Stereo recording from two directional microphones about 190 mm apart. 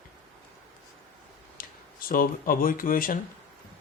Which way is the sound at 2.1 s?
50° left (ahead or behind).